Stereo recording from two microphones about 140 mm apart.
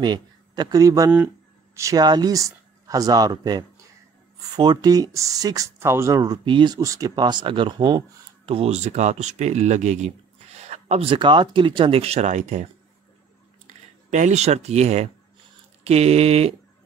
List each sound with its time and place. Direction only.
0.0 s a man's voice: 30° right (ahead or behind)
8.5 s speech: 45° right (ahead or behind)
13.7 s speech: 60° right (ahead or behind)